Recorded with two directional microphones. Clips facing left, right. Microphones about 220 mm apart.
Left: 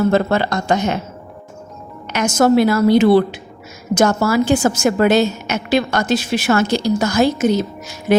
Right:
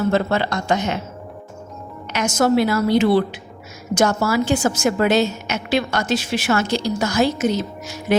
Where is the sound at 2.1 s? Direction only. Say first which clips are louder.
Left 4 dB; 50° left (ahead or behind).